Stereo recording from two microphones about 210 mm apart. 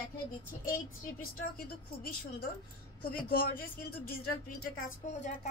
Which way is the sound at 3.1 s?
45° left (ahead or behind).